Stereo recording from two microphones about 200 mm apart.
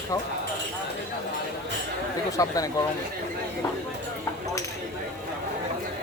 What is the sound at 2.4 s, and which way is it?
Speech, 15° left (ahead or behind).